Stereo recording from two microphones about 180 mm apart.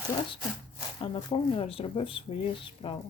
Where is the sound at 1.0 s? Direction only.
30° left (ahead or behind).